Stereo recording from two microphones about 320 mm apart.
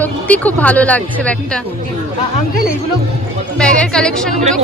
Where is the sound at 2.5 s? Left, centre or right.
Left.